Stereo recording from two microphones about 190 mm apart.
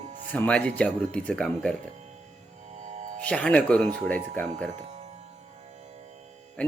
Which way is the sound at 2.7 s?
40° right (ahead or behind).